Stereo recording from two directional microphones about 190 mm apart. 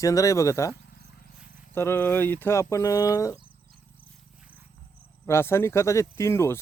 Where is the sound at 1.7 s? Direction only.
10° left (ahead or behind).